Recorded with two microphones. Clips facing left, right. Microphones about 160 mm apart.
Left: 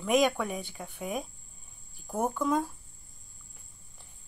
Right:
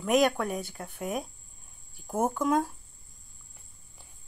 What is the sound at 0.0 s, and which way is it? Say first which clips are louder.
Speech: right 1 dB; centre (ahead or behind).